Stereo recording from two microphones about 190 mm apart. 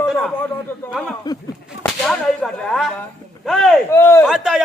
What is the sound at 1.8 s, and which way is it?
Whip, 5° left (ahead or behind).